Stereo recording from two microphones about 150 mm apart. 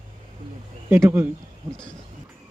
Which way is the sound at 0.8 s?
15° right (ahead or behind).